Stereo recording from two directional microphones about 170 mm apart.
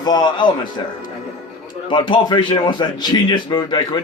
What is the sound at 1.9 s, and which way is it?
Speech, 30° left (ahead or behind).